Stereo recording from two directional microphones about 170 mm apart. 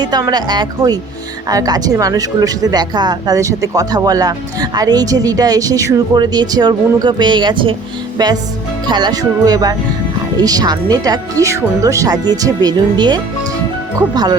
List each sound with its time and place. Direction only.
0.0 s speech: 25° right (ahead or behind)